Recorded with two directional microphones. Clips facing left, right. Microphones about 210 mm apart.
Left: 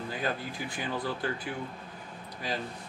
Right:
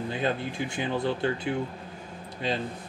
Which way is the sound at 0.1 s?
25° right (ahead or behind).